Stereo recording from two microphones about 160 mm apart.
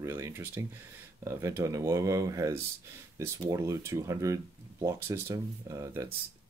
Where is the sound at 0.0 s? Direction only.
15° right (ahead or behind).